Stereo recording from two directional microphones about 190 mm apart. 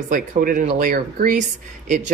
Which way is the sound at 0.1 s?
45° right (ahead or behind).